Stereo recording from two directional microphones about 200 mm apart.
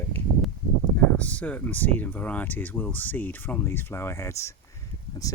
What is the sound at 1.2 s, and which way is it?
Speech, 5° left (ahead or behind).